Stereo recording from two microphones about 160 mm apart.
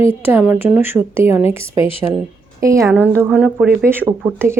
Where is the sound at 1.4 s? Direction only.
35° left (ahead or behind).